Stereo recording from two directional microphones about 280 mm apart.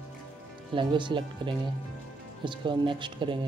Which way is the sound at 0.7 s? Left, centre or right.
Centre.